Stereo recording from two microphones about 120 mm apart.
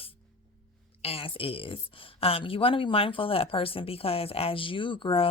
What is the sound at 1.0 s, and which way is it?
Speech, 50° left (ahead or behind).